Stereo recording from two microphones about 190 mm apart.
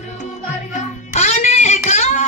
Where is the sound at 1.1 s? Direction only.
35° left (ahead or behind).